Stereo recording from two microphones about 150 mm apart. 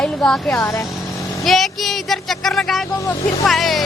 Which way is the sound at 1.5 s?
Centre (ahead or behind).